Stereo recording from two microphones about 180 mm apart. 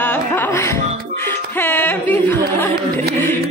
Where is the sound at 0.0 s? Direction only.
10° left (ahead or behind).